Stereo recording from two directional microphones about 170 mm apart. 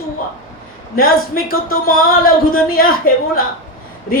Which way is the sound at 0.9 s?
60° left (ahead or behind).